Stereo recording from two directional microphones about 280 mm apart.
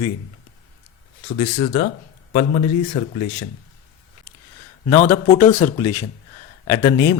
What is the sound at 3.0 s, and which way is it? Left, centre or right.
Speech, left.